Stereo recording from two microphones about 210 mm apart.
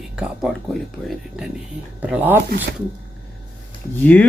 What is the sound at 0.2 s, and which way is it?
Speech, centre (ahead or behind).